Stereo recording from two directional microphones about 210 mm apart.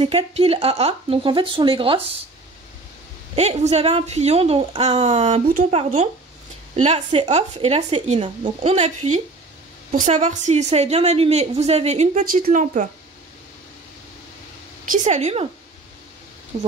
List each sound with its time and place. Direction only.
0.0 s speech: 25° right (ahead or behind)
3.3 s a woman's voice: 30° right (ahead or behind)
14.9 s a woman's voice: 35° right (ahead or behind)
16.5 s a woman's voice: 30° right (ahead or behind)